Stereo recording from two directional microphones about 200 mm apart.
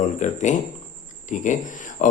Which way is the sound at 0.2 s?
35° left (ahead or behind).